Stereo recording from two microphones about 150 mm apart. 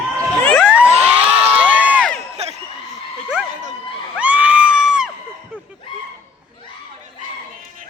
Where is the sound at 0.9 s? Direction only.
45° right (ahead or behind).